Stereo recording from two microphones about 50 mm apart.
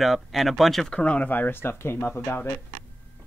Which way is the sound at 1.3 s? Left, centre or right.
Left.